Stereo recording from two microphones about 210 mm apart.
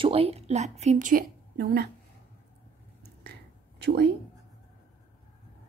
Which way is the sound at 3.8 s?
50° right (ahead or behind).